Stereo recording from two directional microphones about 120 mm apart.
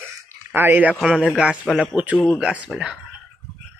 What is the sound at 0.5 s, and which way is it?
Speech, 15° right (ahead or behind).